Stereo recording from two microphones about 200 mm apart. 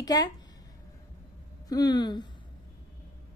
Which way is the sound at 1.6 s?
20° left (ahead or behind).